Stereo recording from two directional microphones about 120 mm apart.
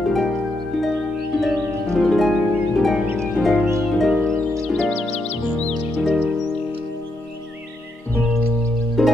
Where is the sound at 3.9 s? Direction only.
Centre (ahead or behind).